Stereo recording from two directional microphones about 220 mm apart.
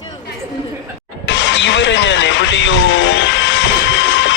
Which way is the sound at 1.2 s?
55° left (ahead or behind).